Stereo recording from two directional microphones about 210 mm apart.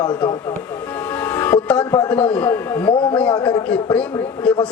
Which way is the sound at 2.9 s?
25° left (ahead or behind).